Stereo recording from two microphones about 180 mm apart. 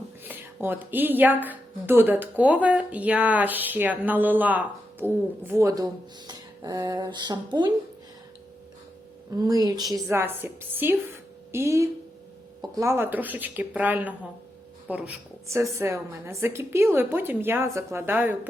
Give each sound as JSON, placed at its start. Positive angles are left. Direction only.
{"t": 0.3, "sound": "speech", "side_deg": -10}
{"t": 9.3, "sound": "speech", "side_deg": -20}